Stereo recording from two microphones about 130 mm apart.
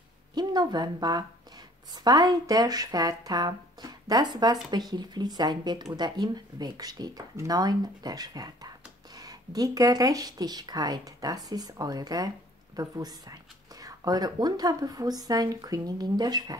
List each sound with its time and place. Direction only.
0.3 s a woman's voice: 30° right (ahead or behind)